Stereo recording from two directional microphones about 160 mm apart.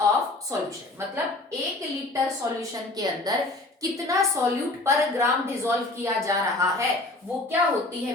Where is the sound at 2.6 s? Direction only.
25° right (ahead or behind).